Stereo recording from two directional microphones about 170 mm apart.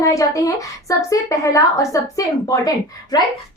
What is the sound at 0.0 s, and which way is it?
A woman's voice, 20° left (ahead or behind).